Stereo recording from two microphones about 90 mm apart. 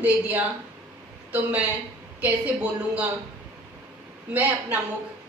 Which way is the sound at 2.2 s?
15° right (ahead or behind).